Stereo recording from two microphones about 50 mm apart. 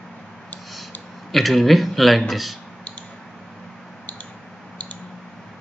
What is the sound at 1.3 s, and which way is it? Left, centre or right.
Speech, centre.